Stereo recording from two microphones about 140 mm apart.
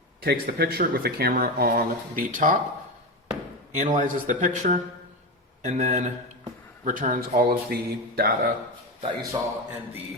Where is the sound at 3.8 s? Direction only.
65° right (ahead or behind).